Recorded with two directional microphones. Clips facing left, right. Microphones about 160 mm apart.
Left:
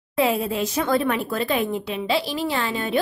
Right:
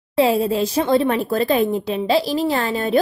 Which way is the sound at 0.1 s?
30° right (ahead or behind).